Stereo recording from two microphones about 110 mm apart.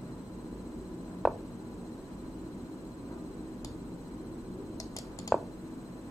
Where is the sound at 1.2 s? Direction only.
Centre (ahead or behind).